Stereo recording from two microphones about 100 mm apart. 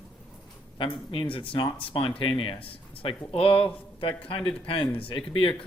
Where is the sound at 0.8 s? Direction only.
60° left (ahead or behind).